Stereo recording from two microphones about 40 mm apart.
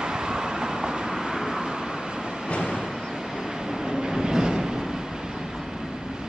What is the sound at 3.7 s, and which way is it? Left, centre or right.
Train, centre.